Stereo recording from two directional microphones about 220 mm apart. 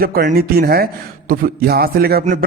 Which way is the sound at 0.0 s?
40° right (ahead or behind).